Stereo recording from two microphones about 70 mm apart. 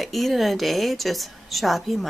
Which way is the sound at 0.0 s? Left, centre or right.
Centre.